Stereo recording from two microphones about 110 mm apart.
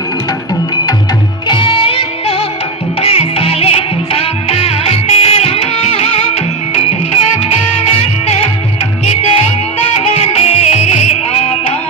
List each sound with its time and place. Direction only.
1.5 s music: 50° left (ahead or behind); by 11.5 s 75° left (ahead or behind)